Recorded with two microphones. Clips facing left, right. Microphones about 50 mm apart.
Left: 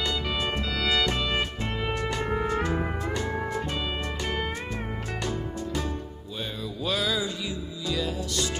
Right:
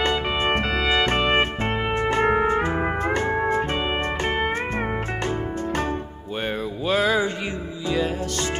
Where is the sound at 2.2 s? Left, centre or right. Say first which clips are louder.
Right 11 dB; right.